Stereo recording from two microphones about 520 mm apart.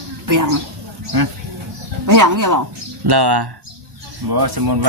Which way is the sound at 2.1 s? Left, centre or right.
Right.